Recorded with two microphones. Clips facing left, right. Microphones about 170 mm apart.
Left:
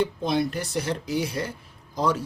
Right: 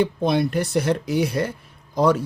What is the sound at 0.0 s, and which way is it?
Speech, 60° right (ahead or behind).